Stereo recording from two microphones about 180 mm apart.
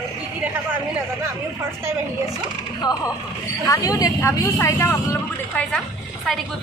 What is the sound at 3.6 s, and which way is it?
A woman's voice, 20° left (ahead or behind).